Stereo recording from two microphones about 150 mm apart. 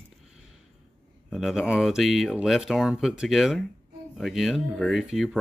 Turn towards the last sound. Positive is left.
turn(degrees=0)  # may be behind; listen again after turning